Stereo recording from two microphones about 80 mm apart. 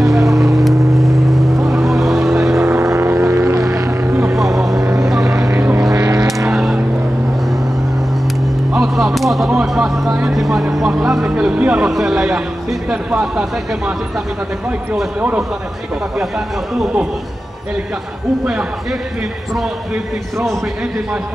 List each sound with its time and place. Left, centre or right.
0.0 s vehicle: centre
2.8 s vehicle: right
4.0 s music: right
4.3 s vehicle: centre
4.8 s vehicle: right
6.5 s vehicle: centre
8.7 s a sound: centre
13.2 s speech: centre
15.1 s speech: centre
18.4 s speech: centre